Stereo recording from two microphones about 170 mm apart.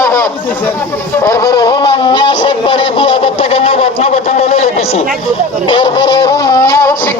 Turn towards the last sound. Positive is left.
turn(degrees=20)  # may be behind; listen again after turning